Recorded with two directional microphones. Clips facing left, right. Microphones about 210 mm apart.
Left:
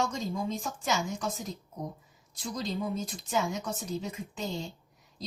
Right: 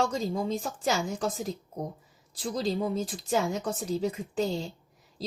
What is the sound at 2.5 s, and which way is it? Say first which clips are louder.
Speech: right 4 dB; 30° right (ahead or behind).